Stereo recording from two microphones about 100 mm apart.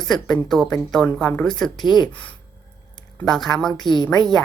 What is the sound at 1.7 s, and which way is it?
Speech, 45° left (ahead or behind).